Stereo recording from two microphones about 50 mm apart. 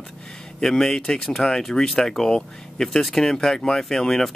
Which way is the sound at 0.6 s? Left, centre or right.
Centre.